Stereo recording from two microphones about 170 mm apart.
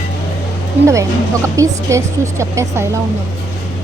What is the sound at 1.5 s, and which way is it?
Speech, 20° right (ahead or behind).